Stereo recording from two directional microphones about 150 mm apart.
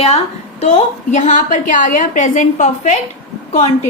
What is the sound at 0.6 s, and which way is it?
A woman's voice, 50° left (ahead or behind).